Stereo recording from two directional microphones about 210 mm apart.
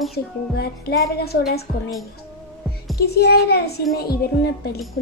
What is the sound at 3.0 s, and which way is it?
Speech, 50° left (ahead or behind).